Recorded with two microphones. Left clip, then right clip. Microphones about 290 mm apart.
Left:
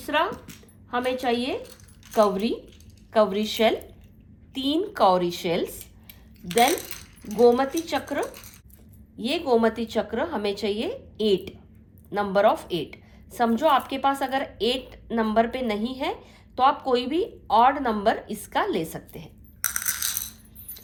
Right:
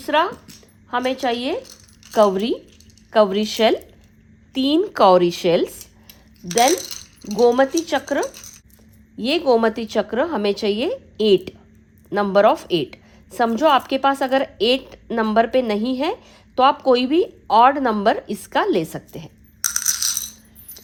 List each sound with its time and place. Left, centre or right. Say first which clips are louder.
0.0 s a woman's voice: right 6 dB; right